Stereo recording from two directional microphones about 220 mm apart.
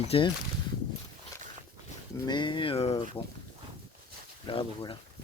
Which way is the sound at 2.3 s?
20° left (ahead or behind).